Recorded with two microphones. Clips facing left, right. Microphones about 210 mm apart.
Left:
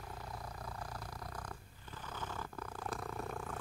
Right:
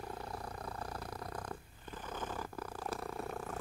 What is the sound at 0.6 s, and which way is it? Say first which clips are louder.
Purr: right 3 dB; 55° right (ahead or behind).